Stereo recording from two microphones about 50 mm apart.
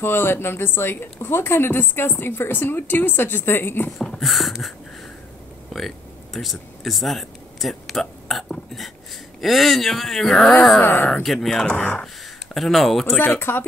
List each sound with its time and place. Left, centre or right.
0.0 s a woman's voice: left
4.2 s a sound: centre
9.4 s speech: centre
10.8 s speech: left
11.2 s speech: centre
11.6 s speech: left
12.5 s speech: centre
13.3 s a woman's voice: left